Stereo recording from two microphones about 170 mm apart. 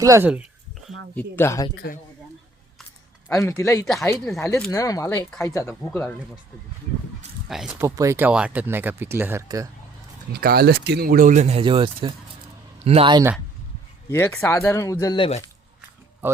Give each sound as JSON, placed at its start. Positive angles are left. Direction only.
{"t": 0.0, "sound": "speech", "side_deg": -20}
{"t": 1.1, "sound": "speech", "side_deg": 15}
{"t": 3.2, "sound": "speech", "side_deg": 15}
{"t": 3.8, "sound": "speech", "side_deg": 0}
{"t": 4.1, "sound": "speech", "side_deg": 15}
{"t": 7.4, "sound": "speech", "side_deg": -5}
{"t": 7.8, "sound": "speech", "side_deg": -20}
{"t": 10.3, "sound": "speech", "side_deg": -70}
{"t": 14.1, "sound": "speech", "side_deg": 15}
{"t": 16.2, "sound": "speech", "side_deg": -10}